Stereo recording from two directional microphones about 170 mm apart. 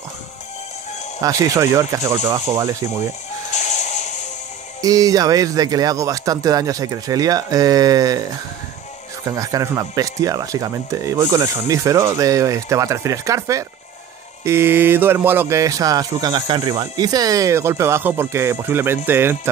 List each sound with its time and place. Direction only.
1.2 s speech: 15° right (ahead or behind)
3.5 s music: 45° left (ahead or behind)
4.8 s speech: 20° right (ahead or behind)
9.2 s speech: 20° right (ahead or behind)